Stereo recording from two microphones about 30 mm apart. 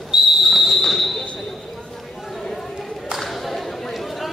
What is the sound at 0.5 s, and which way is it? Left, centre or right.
Fireworks, centre.